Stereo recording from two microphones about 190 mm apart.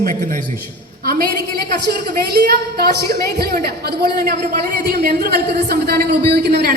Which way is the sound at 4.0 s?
55° right (ahead or behind).